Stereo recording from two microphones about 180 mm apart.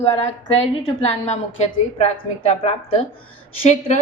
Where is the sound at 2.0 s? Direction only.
40° left (ahead or behind).